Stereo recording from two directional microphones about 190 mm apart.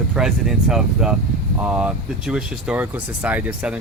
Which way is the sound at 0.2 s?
5° right (ahead or behind).